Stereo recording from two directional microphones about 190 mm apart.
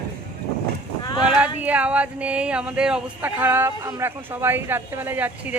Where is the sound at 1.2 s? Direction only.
5° right (ahead or behind).